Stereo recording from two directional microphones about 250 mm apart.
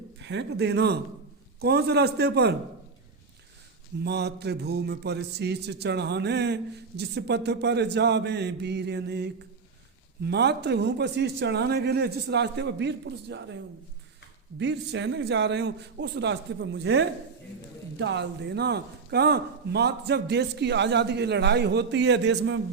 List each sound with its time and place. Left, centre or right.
0.2 s a man's voice: right
4.0 s a man's voice: right
14.6 s speech: right